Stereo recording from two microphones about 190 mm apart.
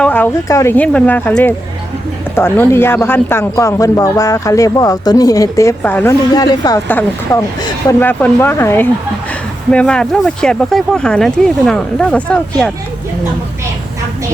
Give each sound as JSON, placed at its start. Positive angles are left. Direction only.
{"t": 0.0, "sound": "speech", "side_deg": 10}
{"t": 6.3, "sound": "a woman's voice", "side_deg": 20}